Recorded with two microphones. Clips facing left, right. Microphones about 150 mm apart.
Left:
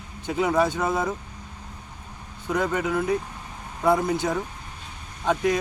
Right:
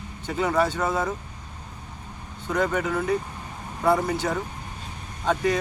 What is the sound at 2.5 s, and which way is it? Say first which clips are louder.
Speech: even; 10° left (ahead or behind).